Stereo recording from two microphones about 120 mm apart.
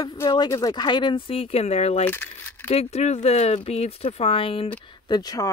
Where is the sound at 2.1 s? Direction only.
20° left (ahead or behind).